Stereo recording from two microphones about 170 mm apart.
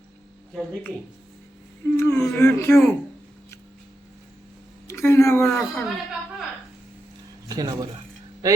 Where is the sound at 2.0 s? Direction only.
15° left (ahead or behind).